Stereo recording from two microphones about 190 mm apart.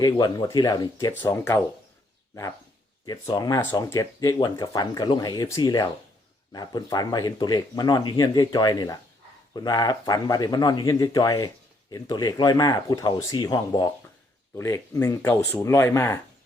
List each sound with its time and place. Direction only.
0.0 s speech: 20° left (ahead or behind)
3.1 s speech: 20° left (ahead or behind)